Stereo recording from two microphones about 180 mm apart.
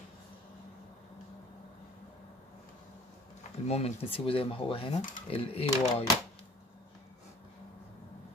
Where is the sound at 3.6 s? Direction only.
35° left (ahead or behind).